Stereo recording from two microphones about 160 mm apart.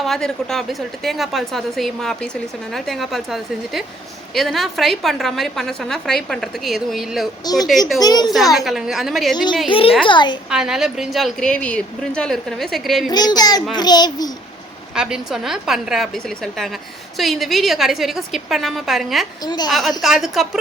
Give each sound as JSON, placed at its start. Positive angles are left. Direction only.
{"t": 0.0, "sound": "a woman's voice", "side_deg": 0}
{"t": 7.9, "sound": "a child's voice", "side_deg": 25}
{"t": 8.3, "sound": "a woman's voice", "side_deg": 0}
{"t": 9.3, "sound": "a child's voice", "side_deg": 30}
{"t": 10.5, "sound": "a woman's voice", "side_deg": -5}
{"t": 13.1, "sound": "a child's voice", "side_deg": 25}
{"t": 14.9, "sound": "a woman's voice", "side_deg": -5}
{"t": 19.5, "sound": "a child's voice", "side_deg": 25}
{"t": 20.0, "sound": "a woman's voice", "side_deg": 0}